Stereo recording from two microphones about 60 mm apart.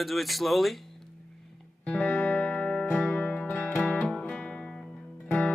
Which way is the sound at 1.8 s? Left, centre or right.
Left.